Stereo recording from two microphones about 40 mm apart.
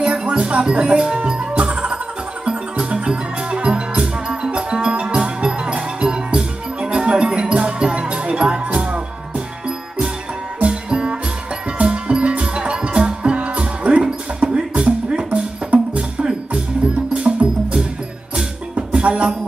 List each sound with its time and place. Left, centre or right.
0.0 s speech: right
1.6 s music: right
10.6 s music: right